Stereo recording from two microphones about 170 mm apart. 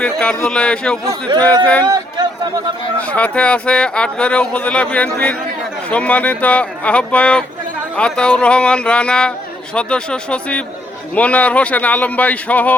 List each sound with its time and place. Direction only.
0.0 s speech: 5° left (ahead or behind)
1.9 s a sound: 25° right (ahead or behind)
3.0 s speech: 10° left (ahead or behind)